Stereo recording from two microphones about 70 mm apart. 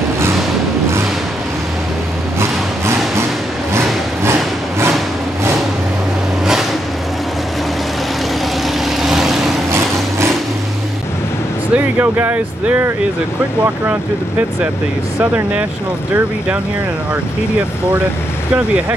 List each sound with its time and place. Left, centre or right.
3.7 s music: right
8.8 s vehicle: centre
9.7 s vehicle: right
11.7 s speech: right